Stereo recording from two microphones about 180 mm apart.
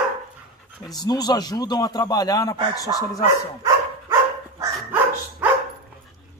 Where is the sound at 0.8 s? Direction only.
20° left (ahead or behind).